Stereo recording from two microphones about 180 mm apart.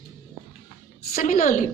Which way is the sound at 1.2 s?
40° left (ahead or behind).